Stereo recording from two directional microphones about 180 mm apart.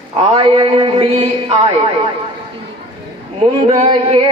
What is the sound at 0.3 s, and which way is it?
A man's voice, 30° right (ahead or behind).